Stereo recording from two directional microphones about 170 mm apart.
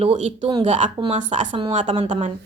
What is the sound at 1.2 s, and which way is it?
Speech, 45° right (ahead or behind).